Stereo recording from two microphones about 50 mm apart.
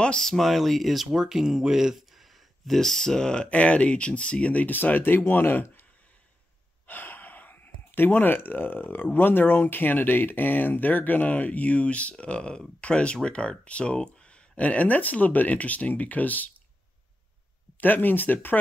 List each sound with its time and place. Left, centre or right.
0.2 s speech: centre
1.1 s speech: centre
3.4 s speech: left
6.9 s speech: left
17.7 s speech: left